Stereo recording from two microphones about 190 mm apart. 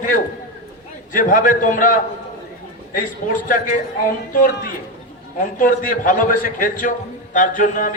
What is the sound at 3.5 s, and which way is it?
Speech, 40° left (ahead or behind).